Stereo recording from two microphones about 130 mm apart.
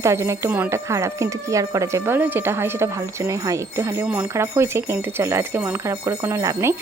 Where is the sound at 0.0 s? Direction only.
20° right (ahead or behind).